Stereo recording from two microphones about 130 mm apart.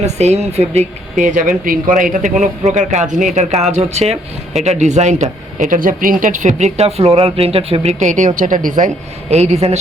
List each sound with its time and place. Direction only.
0.0 s speech: 60° right (ahead or behind)
1.2 s a man's voice: 80° right
3.3 s speech: 60° right (ahead or behind)
8.4 s speech: 85° right
9.3 s speech: 55° right (ahead or behind)